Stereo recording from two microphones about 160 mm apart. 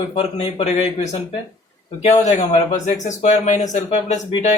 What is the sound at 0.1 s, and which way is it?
Speech, 40° left (ahead or behind).